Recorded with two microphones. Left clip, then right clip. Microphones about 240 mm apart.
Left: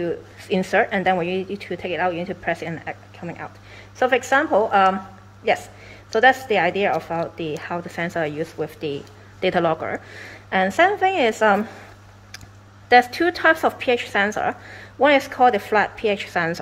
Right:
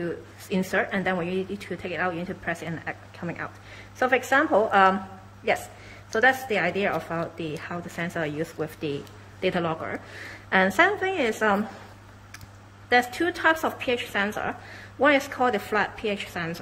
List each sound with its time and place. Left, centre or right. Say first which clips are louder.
0.0 s speech: left 6 dB; centre
6.1 s speech: left 5 dB; centre
12.9 s speech: left 7 dB; centre